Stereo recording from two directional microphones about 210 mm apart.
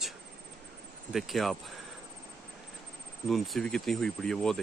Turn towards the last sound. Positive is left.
turn(degrees=0)  # may be behind; listen again after turning